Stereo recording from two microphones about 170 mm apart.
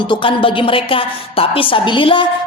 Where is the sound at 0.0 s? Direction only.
30° left (ahead or behind).